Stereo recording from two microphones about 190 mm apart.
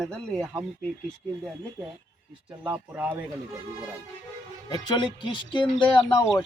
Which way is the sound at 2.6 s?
5° right (ahead or behind).